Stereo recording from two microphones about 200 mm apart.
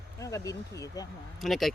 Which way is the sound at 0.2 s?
15° left (ahead or behind).